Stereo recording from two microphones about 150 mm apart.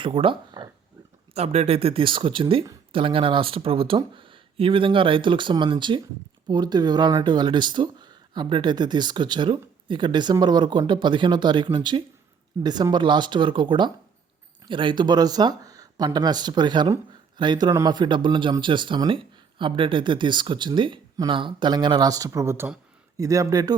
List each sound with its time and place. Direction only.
0.0 s speech: 35° right (ahead or behind)
1.3 s speech: 45° right (ahead or behind); by 23.7 s 25° right (ahead or behind)